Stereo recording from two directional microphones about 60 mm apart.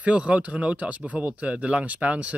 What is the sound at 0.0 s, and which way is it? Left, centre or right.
Speech, right.